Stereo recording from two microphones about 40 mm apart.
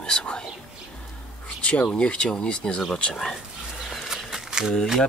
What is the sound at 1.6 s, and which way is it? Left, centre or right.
Speech, left.